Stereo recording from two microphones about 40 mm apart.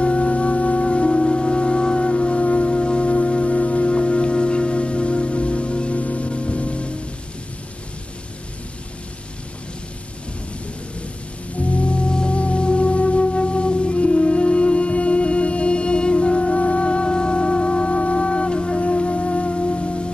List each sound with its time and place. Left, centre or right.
0.0 s music: left
11.5 s music: left